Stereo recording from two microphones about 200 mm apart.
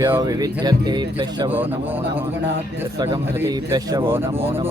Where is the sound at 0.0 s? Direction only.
15° right (ahead or behind).